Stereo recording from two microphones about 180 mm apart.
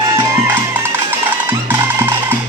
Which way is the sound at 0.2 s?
10° right (ahead or behind).